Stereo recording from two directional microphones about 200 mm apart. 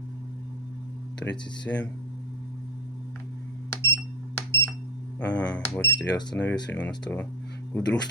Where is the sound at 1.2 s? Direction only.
5° left (ahead or behind).